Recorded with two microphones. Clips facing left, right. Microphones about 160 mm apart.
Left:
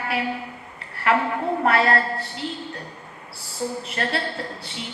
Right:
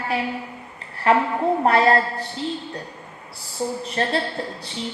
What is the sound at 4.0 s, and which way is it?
Speech, 30° right (ahead or behind).